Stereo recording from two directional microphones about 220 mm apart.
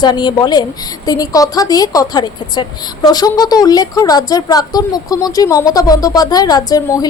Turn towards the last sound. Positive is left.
turn(degrees=15)  # may be behind; listen again after turning